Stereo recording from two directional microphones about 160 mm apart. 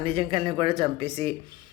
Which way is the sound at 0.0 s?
35° right (ahead or behind).